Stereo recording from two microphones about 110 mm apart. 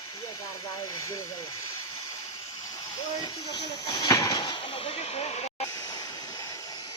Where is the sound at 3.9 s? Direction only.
35° left (ahead or behind).